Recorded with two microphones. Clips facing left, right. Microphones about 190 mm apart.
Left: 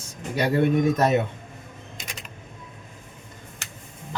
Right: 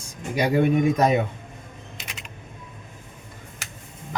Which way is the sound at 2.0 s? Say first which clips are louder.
Left 2 dB; 45° left (ahead or behind).